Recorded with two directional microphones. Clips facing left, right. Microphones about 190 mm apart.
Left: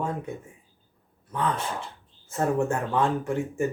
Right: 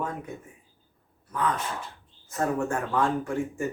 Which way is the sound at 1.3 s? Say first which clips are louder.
Left 1 dB; 30° left (ahead or behind).